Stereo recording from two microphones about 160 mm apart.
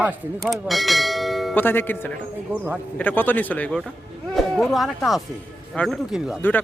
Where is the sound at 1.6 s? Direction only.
15° left (ahead or behind).